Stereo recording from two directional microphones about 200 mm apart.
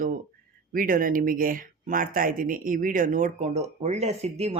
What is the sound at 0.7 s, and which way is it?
Speech, 45° right (ahead or behind).